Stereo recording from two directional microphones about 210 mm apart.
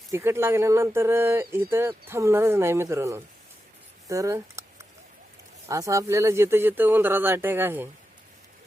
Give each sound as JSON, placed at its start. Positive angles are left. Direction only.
{"t": 0.1, "sound": "speech", "side_deg": -15}
{"t": 4.1, "sound": "a sound", "side_deg": -15}
{"t": 5.6, "sound": "speech", "side_deg": -15}